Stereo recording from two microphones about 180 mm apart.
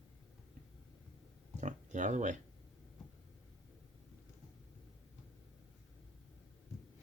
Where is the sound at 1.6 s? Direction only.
40° right (ahead or behind).